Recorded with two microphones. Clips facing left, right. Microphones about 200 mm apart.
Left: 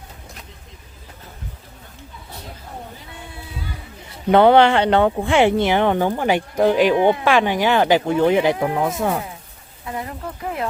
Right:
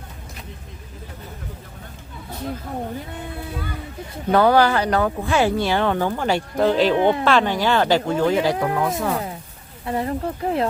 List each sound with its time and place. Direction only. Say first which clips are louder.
4.3 s speech: left 3 dB; 25° left (ahead or behind)
9.8 s speech: right 6 dB; 35° right (ahead or behind)